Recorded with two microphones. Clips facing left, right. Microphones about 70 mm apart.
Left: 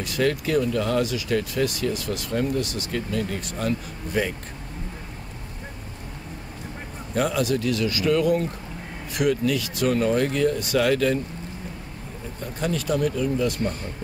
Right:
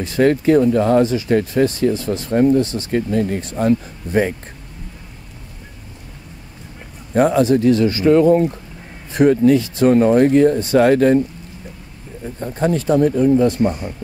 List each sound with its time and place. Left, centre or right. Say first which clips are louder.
0.0 s speech: right 9 dB; right
7.2 s speech: right 9 dB; right
12.4 s speech: right 8 dB; right